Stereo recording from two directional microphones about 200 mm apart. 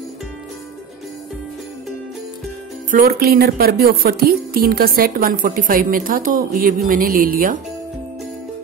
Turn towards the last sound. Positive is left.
turn(degrees=-45)  # may be behind; listen again after turning